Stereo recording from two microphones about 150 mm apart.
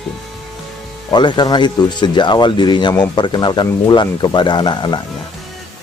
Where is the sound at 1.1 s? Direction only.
30° left (ahead or behind).